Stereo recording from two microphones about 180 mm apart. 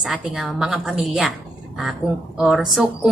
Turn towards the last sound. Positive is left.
turn(degrees=0)  # may be behind; listen again after turning